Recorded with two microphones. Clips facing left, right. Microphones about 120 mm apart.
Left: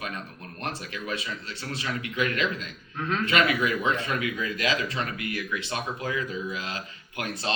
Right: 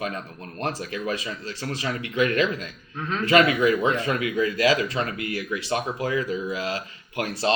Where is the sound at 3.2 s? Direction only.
30° right (ahead or behind).